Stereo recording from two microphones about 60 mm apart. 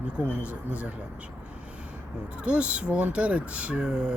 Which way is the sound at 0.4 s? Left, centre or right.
Right.